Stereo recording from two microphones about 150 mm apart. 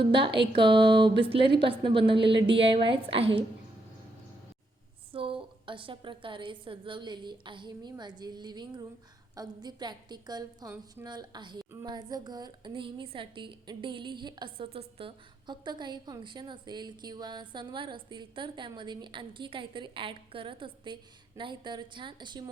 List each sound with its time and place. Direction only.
0.0 s a woman's voice: 35° right (ahead or behind)
5.1 s a woman's voice: 35° right (ahead or behind)